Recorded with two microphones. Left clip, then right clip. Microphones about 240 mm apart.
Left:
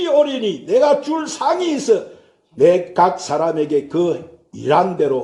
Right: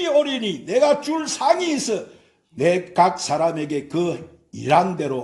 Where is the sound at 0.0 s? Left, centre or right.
Right.